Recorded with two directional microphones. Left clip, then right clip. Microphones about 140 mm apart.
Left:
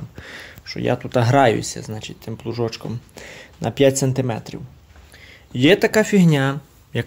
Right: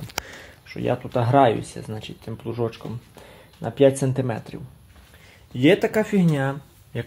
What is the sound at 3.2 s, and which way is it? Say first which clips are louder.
Speech: left 8 dB; 50° left (ahead or behind).